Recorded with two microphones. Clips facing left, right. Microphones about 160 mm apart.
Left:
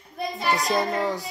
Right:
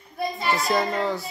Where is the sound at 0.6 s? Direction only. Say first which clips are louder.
Right 1 dB; 15° left (ahead or behind).